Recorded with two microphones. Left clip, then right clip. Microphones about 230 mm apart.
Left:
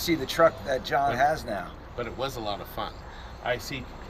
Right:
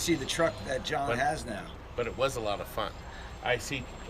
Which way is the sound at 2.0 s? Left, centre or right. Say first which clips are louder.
Right 2 dB; centre.